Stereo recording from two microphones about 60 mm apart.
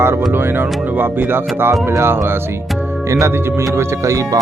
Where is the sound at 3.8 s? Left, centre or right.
Right.